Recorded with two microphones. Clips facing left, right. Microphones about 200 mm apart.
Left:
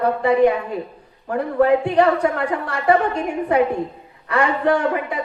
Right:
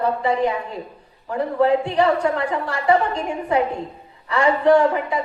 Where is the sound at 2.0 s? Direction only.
60° left (ahead or behind).